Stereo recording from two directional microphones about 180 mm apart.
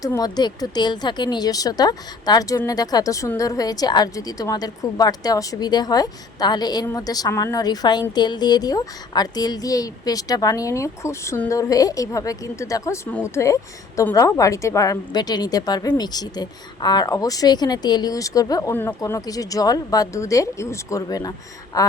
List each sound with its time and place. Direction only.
0.0 s a woman's voice: 20° left (ahead or behind)